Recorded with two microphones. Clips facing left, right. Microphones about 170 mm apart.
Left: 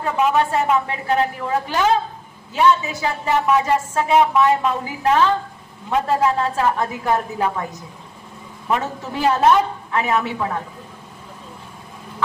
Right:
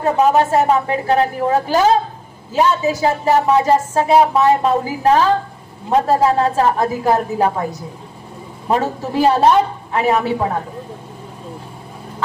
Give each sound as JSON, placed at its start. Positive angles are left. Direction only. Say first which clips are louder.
{"t": 0.0, "sound": "a woman's voice", "louder": "right 5 dB", "side_deg": -40}
{"t": 8.6, "sound": "a woman's voice", "louder": "right 5 dB", "side_deg": -35}